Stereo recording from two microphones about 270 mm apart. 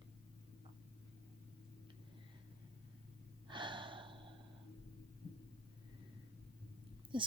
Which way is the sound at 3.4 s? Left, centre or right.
Centre.